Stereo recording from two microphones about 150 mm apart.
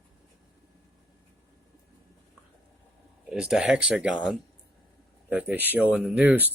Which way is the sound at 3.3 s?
5° right (ahead or behind).